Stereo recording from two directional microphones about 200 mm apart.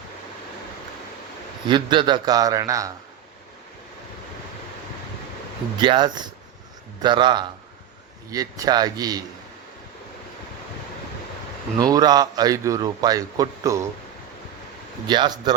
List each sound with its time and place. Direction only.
1.6 s a man's voice: 25° right (ahead or behind)
5.8 s a man's voice: 25° right (ahead or behind)
11.8 s a man's voice: 20° right (ahead or behind)
15.0 s a man's voice: 20° right (ahead or behind)